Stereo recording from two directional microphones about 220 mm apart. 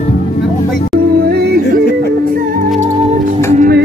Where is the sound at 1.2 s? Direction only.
45° right (ahead or behind).